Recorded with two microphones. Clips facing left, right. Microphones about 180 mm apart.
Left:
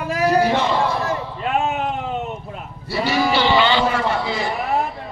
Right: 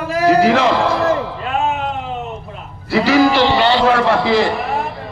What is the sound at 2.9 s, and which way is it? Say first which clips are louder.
Speech: right 7 dB; 90° right.